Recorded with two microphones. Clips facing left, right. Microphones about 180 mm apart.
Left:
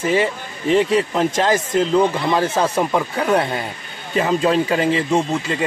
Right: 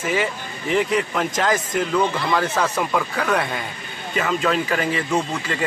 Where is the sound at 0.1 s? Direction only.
30° left (ahead or behind).